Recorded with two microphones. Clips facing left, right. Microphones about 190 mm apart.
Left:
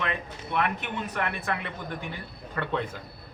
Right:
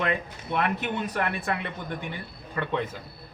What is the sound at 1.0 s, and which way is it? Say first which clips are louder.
Speech: right 2 dB; 35° right (ahead or behind).